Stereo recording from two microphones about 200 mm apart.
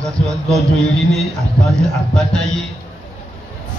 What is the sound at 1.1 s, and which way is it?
A man's voice, centre (ahead or behind).